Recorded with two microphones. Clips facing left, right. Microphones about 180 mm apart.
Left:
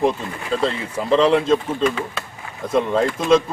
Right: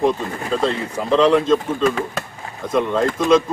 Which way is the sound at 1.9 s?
40° right (ahead or behind).